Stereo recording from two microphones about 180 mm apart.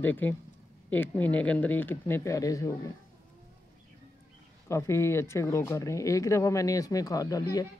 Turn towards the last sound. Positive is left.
turn(degrees=20)  # may be behind; listen again after turning